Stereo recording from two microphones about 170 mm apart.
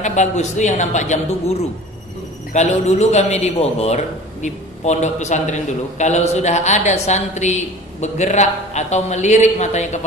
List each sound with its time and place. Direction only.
0.0 s a man's voice: 45° left (ahead or behind)